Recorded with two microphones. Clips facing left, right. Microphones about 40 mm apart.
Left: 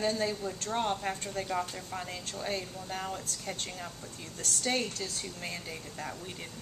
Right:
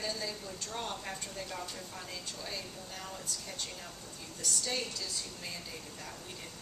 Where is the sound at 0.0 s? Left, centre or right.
Left.